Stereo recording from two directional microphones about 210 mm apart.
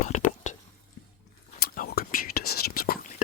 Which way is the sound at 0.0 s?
35° left (ahead or behind).